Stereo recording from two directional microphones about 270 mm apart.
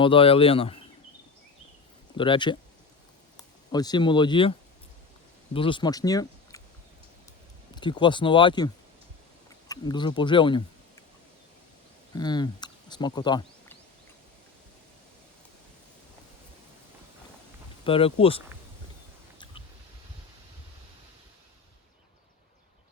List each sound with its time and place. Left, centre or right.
0.0 s speech: centre
2.1 s speech: centre
5.5 s speech: centre
7.8 s speech: centre
12.1 s speech: centre
17.8 s speech: left